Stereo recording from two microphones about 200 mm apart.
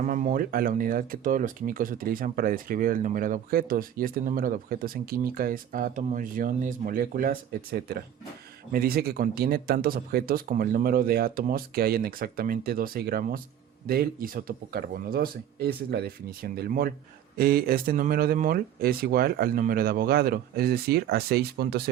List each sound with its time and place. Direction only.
0.0 s speech: 40° right (ahead or behind)